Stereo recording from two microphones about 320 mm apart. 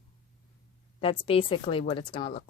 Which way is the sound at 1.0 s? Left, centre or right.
Centre.